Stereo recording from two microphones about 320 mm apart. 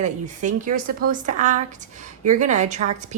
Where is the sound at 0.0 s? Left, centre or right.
Right.